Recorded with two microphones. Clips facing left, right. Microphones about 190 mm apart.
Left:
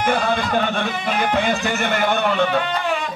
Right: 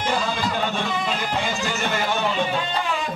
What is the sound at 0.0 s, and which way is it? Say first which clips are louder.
Music: left 4 dB; 60° left (ahead or behind).